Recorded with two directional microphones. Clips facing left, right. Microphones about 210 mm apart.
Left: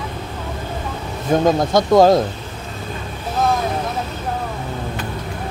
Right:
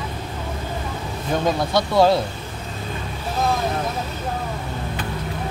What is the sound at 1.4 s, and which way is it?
Speech, 45° left (ahead or behind).